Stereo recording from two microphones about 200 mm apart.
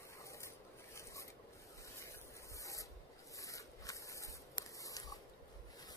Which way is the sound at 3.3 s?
15° left (ahead or behind).